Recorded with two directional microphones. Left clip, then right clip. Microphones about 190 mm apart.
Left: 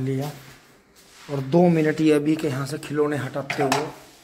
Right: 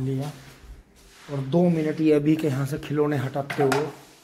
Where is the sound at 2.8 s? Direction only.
25° right (ahead or behind).